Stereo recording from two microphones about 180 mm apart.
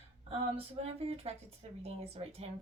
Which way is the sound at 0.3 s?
30° right (ahead or behind).